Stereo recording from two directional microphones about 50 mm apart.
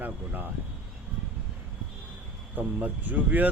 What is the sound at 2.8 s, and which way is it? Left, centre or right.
Speech, right.